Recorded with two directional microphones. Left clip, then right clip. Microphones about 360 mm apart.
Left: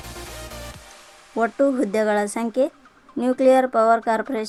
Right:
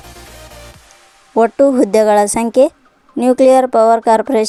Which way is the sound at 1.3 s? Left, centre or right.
Centre.